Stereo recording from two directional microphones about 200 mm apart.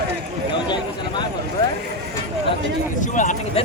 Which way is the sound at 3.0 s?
40° left (ahead or behind).